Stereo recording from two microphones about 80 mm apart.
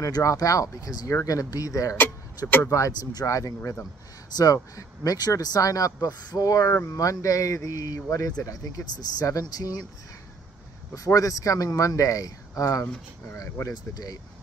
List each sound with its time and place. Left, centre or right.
0.0 s speech: left
2.0 s speech: left
3.1 s speech: left
11.1 s speech: left